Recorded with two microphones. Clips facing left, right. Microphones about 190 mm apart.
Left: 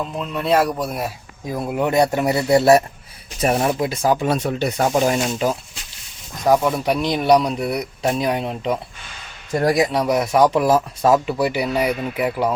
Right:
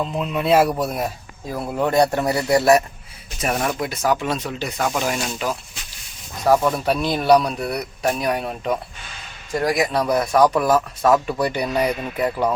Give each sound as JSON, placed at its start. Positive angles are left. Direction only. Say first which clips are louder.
{"t": 0.0, "sound": "speech", "louder": "right 2 dB", "side_deg": 0}
{"t": 1.5, "sound": "speech", "louder": "left 1 dB", "side_deg": 15}
{"t": 2.4, "sound": "speech", "louder": "left 2 dB", "side_deg": 25}
{"t": 5.1, "sound": "speech", "louder": "left 5 dB", "side_deg": 25}
{"t": 6.4, "sound": "speech", "louder": "left 1 dB", "side_deg": 10}
{"t": 11.3, "sound": "speech", "louder": "left 2 dB", "side_deg": 10}